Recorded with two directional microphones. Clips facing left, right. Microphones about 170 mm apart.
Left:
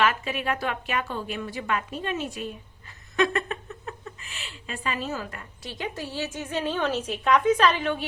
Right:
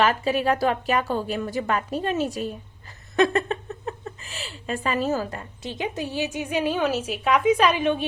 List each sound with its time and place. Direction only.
0.0 s speech: 35° right (ahead or behind); by 8.0 s 15° right (ahead or behind)